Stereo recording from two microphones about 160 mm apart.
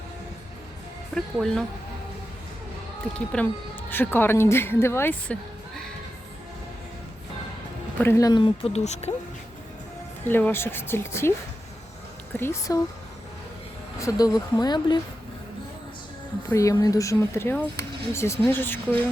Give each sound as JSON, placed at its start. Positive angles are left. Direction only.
{"t": 1.1, "sound": "speech", "side_deg": 5}
{"t": 3.2, "sound": "speech", "side_deg": 10}
{"t": 8.0, "sound": "speech", "side_deg": 20}
{"t": 10.2, "sound": "speech", "side_deg": 10}
{"t": 12.4, "sound": "speech", "side_deg": 20}
{"t": 14.0, "sound": "speech", "side_deg": 25}
{"t": 16.5, "sound": "speech", "side_deg": 20}